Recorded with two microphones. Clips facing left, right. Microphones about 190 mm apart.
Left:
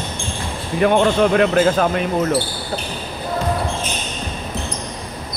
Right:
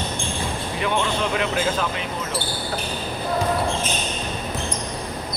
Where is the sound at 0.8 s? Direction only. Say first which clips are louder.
Left 10 dB; 55° left (ahead or behind).